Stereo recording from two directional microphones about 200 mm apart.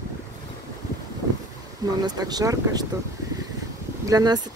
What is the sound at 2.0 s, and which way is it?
Speech, 20° right (ahead or behind).